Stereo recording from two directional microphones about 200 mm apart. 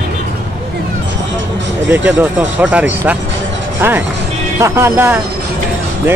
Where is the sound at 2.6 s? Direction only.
5° right (ahead or behind).